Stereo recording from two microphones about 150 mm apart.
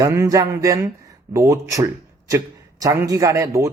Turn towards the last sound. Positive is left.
turn(degrees=-20)  # may be behind; listen again after turning